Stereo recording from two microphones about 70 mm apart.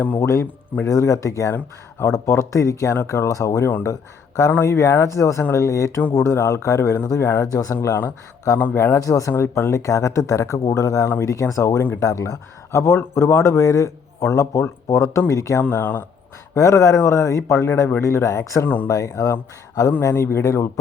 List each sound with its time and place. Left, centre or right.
0.2 s speech: left
7.4 s speech: left
9.0 s speech: left
9.3 s speech: left
15.7 s speech: left
16.6 s speech: left
18.6 s speech: left
18.9 s speech: left
20.0 s speech: left